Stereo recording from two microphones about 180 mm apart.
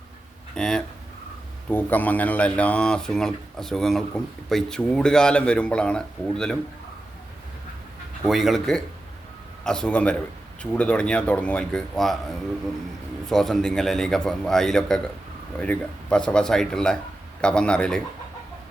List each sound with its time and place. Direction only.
0.5 s speech: 5° left (ahead or behind)
8.2 s speech: centre (ahead or behind)
13.2 s speech: centre (ahead or behind)